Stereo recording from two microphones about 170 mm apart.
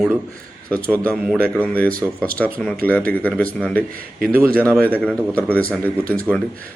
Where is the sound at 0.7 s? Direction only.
10° left (ahead or behind).